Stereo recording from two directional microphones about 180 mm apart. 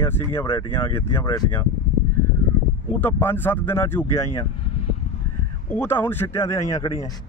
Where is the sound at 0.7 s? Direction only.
15° left (ahead or behind).